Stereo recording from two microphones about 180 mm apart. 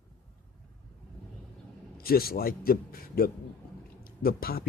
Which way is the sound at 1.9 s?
55° left (ahead or behind).